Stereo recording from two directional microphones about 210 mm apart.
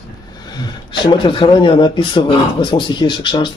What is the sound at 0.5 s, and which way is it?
Speech, 20° left (ahead or behind).